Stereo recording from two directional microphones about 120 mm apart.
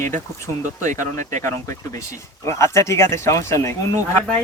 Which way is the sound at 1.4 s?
25° left (ahead or behind).